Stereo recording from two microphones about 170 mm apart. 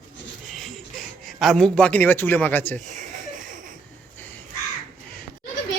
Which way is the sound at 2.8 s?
45° right (ahead or behind).